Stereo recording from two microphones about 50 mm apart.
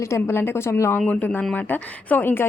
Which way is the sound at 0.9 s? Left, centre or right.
Left.